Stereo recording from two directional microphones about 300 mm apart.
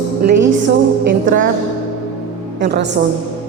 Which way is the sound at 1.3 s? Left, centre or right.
Right.